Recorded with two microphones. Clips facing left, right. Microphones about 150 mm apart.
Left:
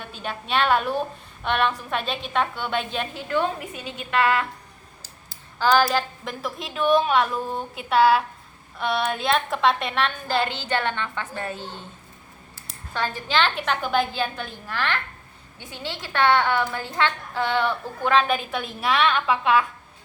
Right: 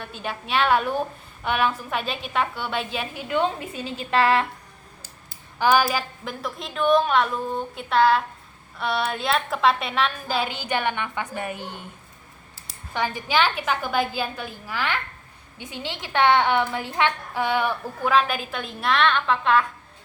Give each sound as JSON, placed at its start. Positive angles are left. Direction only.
{"t": 0.1, "sound": "a woman's voice", "side_deg": 0}
{"t": 3.8, "sound": "a woman's voice", "side_deg": -35}
{"t": 5.5, "sound": "a woman's voice", "side_deg": -10}
{"t": 12.9, "sound": "a woman's voice", "side_deg": -15}